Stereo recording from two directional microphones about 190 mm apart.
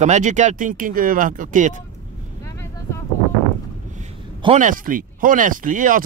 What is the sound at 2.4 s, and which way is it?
Vehicle, 15° left (ahead or behind).